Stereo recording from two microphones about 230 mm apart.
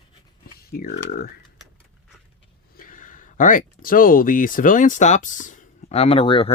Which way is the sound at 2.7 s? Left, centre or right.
Left.